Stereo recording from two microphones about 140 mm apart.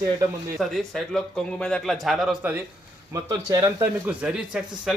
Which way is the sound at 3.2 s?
25° right (ahead or behind).